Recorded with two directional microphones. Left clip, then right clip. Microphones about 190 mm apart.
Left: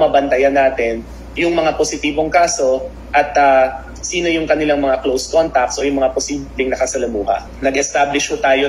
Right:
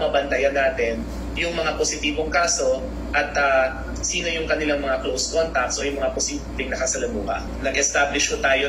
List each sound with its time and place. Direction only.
0.0 s a man's voice: 25° left (ahead or behind)